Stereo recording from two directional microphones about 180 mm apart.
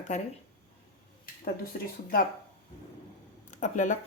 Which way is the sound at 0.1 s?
40° left (ahead or behind).